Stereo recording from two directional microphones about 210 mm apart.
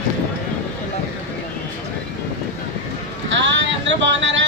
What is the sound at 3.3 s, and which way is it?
Boat, 60° right (ahead or behind).